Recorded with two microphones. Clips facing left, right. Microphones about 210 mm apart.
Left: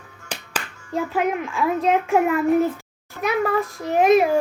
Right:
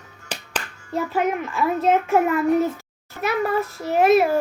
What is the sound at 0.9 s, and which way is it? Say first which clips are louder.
A child's voice: even; centre (ahead or behind).